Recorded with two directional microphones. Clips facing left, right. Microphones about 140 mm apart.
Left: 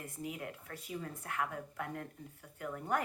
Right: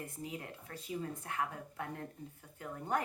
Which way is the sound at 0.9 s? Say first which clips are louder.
Right 2 dB; 20° right (ahead or behind).